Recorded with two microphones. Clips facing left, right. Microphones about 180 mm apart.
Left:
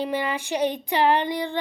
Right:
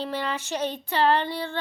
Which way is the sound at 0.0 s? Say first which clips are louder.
Left 3 dB; 10° left (ahead or behind).